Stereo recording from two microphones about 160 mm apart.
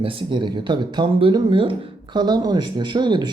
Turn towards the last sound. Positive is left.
turn(degrees=-30)  # may be behind; listen again after turning